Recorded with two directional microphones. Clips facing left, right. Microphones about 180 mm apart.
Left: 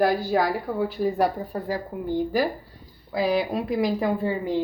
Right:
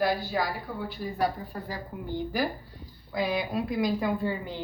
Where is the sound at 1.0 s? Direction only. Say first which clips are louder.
Left 4 dB; 40° left (ahead or behind).